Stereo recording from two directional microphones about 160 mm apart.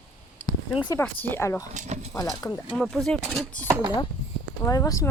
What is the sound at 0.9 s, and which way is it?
Speech, 10° left (ahead or behind).